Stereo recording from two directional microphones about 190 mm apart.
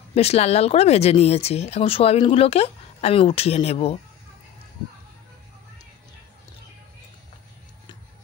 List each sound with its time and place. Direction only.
0.1 s speech: 35° left (ahead or behind)